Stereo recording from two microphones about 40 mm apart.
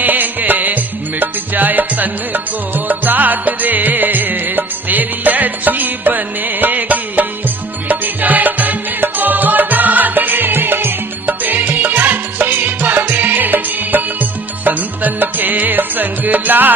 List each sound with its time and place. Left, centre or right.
0.0 s music: right
11.2 s music: right